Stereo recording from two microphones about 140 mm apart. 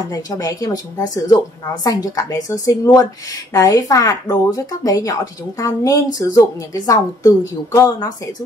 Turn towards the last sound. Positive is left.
turn(degrees=25)  # may be behind; listen again after turning